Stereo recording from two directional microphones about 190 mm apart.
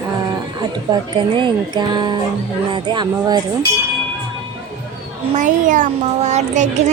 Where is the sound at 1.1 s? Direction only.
25° right (ahead or behind).